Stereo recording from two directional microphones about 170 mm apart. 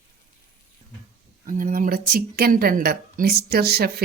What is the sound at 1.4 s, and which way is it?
Speech, 50° right (ahead or behind).